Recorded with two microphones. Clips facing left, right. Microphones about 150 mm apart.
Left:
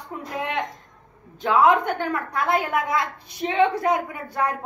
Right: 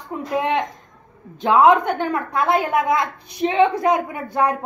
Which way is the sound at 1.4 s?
20° right (ahead or behind).